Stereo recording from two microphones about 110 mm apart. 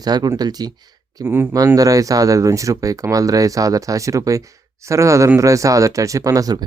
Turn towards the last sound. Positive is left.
turn(degrees=-35)  # may be behind; listen again after turning